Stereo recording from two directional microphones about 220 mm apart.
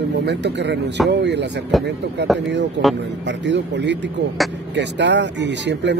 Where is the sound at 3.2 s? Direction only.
55° right (ahead or behind).